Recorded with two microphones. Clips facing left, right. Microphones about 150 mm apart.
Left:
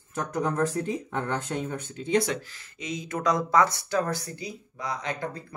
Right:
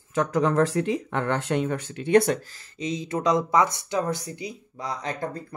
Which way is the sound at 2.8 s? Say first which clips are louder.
Right 4 dB; 30° right (ahead or behind).